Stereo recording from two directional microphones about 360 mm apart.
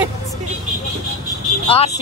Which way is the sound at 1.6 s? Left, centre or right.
Centre.